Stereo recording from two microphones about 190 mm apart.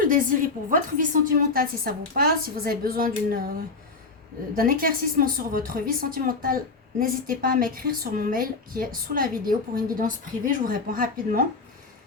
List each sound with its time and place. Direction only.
0.1 s a woman's voice: 45° right (ahead or behind)
4.5 s a woman's voice: 50° right (ahead or behind)